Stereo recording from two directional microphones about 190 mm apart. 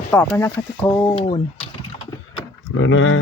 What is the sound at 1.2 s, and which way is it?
Speech, 30° left (ahead or behind).